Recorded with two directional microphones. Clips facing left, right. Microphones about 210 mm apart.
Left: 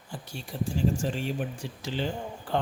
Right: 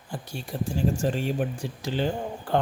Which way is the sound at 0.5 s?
50° right (ahead or behind).